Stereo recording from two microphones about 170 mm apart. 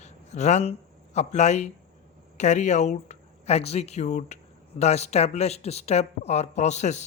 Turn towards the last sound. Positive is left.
turn(degrees=45)  # may be behind; listen again after turning